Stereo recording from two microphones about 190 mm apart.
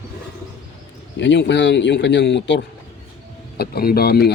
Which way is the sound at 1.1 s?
70° left (ahead or behind).